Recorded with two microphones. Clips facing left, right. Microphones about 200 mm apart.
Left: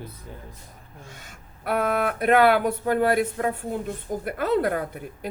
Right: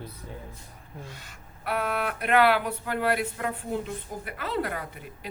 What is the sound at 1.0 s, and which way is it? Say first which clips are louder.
Speech: even; 45° left (ahead or behind).